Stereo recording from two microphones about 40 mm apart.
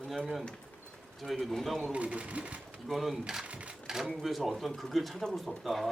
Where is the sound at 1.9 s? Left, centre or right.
Right.